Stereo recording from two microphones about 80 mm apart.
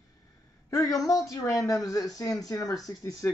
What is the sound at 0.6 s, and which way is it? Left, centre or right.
Speech, left.